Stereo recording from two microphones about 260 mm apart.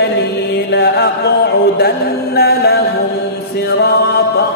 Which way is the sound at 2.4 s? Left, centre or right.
Left.